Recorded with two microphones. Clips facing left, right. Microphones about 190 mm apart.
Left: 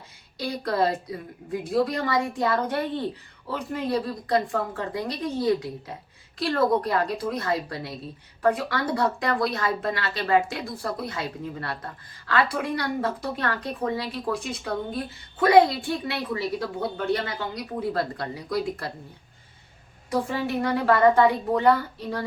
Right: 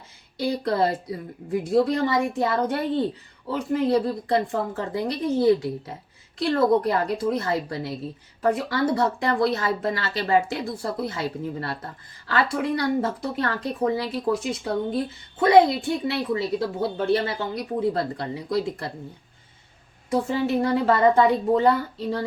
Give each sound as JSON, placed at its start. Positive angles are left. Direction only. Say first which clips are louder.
{"t": 0.3, "sound": "speech", "louder": "right 2 dB", "side_deg": -25}
{"t": 20.1, "sound": "speech", "louder": "right 3 dB", "side_deg": -25}